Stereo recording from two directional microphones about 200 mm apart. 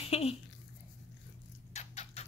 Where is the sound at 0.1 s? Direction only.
30° left (ahead or behind).